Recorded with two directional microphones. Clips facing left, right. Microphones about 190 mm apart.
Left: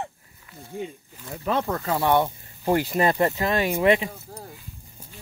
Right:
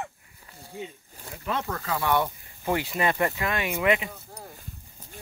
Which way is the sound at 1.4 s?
40° left (ahead or behind).